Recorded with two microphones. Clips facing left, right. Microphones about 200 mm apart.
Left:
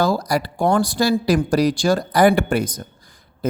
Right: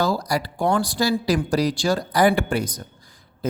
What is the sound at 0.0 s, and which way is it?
Speech, 55° left (ahead or behind).